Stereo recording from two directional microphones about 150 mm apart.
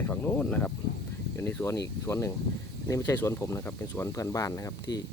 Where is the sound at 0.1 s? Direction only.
10° left (ahead or behind).